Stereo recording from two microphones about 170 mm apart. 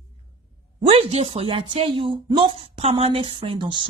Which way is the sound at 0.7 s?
35° right (ahead or behind).